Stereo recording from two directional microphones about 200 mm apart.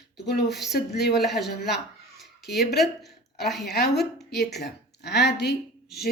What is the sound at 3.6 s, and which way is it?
Speech, 55° left (ahead or behind).